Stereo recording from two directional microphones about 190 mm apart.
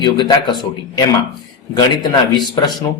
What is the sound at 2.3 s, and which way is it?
Speech, 20° left (ahead or behind).